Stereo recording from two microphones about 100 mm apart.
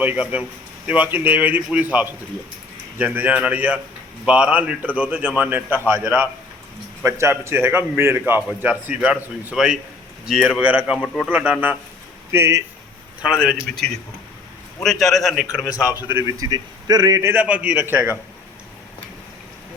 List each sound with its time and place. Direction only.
0.0 s speech: 15° right (ahead or behind)
7.0 s a man's voice: 25° right (ahead or behind)
8.4 s a man's voice: 15° right (ahead or behind)
10.6 s speech: 15° right (ahead or behind)
10.9 s a man's voice: centre (ahead or behind)
11.3 s speech: 15° right (ahead or behind)
12.3 s a man's voice: 30° right (ahead or behind)
13.3 s a man's voice: 5° left (ahead or behind)
14.8 s a man's voice: 5° left (ahead or behind)
16.2 s a man's voice: 35° right (ahead or behind)
17.3 s speech: 15° right (ahead or behind)